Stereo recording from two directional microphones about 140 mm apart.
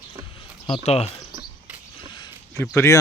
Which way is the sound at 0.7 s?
50° left (ahead or behind).